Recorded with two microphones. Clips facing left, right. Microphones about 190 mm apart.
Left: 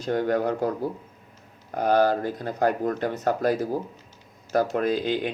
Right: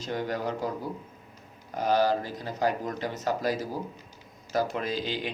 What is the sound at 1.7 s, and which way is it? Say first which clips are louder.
Speech: left 4 dB; 55° left (ahead or behind).